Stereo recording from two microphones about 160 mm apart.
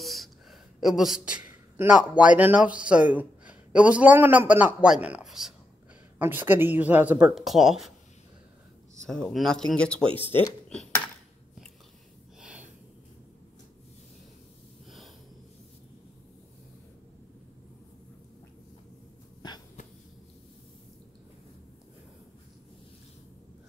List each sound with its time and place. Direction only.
0.0 s speech: centre (ahead or behind)
6.1 s a woman's voice: 15° right (ahead or behind)
9.0 s speech: 5° left (ahead or behind)
10.0 s speech: 35° right (ahead or behind)
12.4 s gasp: 5° right (ahead or behind)
19.4 s hiccup: 25° left (ahead or behind)